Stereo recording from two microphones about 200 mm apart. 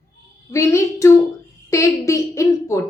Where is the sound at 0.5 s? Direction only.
15° left (ahead or behind).